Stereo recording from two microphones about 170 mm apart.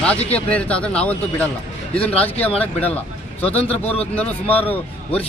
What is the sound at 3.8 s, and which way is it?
Speech, 35° left (ahead or behind).